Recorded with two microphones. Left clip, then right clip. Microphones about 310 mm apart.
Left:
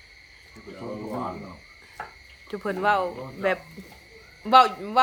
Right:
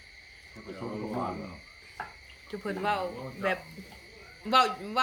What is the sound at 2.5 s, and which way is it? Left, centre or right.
Speech, centre.